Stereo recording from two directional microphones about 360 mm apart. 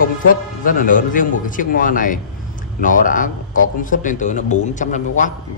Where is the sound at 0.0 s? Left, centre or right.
Left.